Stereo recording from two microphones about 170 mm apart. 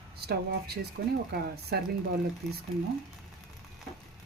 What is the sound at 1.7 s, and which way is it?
Speech, 75° right (ahead or behind).